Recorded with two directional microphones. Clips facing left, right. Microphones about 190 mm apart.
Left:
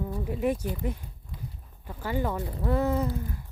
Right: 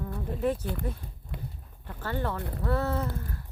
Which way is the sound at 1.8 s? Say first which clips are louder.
Left 2 dB; 10° left (ahead or behind).